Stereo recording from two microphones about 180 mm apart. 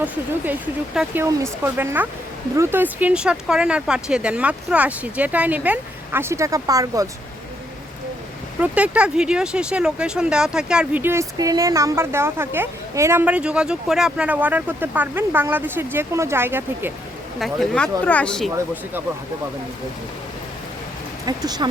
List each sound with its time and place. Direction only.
0.9 s speech: 15° right (ahead or behind)
8.6 s speech: 10° right (ahead or behind)
17.4 s speech: centre (ahead or behind)
18.5 s speech: 10° right (ahead or behind)
21.2 s speech: 20° right (ahead or behind)